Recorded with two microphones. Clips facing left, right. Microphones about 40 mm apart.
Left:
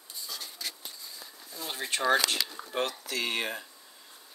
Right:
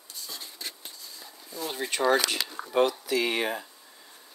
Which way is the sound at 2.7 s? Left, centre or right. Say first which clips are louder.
Right 9 dB; centre.